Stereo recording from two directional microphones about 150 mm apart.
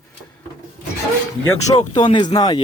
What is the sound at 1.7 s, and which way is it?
Speech, 30° left (ahead or behind).